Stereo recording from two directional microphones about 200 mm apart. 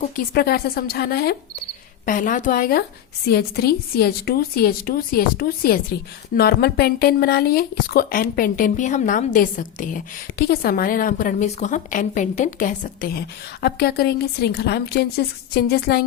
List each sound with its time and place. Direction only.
0.2 s speech: 50° left (ahead or behind)